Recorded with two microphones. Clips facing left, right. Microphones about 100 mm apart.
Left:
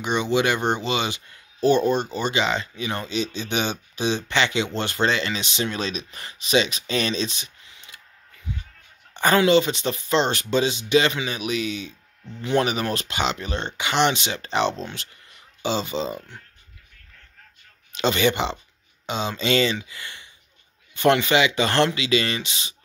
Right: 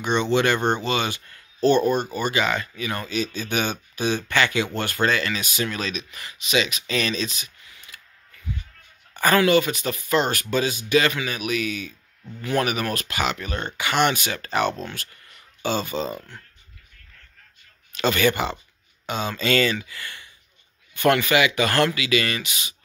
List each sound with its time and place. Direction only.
0.0 s speech: 15° left (ahead or behind)
8.5 s music: 20° left (ahead or behind)
9.1 s speech: 25° left (ahead or behind)
17.9 s speech: 20° left (ahead or behind)